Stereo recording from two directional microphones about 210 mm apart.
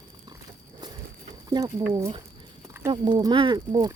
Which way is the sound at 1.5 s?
15° right (ahead or behind).